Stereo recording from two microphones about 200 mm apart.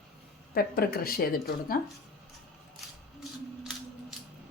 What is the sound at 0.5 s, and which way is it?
Speech, 50° left (ahead or behind).